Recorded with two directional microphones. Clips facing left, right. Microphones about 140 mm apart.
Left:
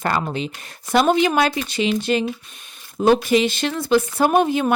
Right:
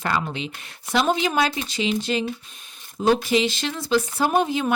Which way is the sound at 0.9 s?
60° left (ahead or behind).